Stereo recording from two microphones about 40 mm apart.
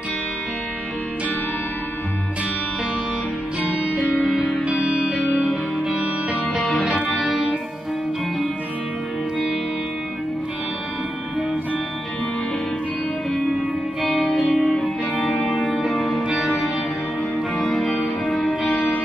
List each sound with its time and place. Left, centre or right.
3.6 s music: right
4.6 s music: right
5.3 s music: centre
6.8 s music: centre
7.2 s music: centre
14.0 s music: centre
17.7 s music: centre